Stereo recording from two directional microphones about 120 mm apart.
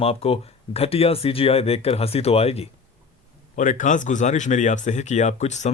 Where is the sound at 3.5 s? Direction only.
90° left.